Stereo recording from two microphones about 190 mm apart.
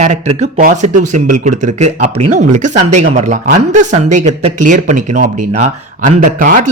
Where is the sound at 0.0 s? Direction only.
35° right (ahead or behind).